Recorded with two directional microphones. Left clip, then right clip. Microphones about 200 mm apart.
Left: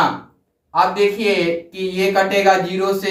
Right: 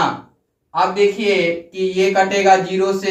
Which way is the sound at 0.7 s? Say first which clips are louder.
Even; 15° right (ahead or behind).